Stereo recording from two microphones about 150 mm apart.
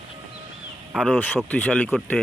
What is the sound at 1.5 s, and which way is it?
Speech, 10° left (ahead or behind).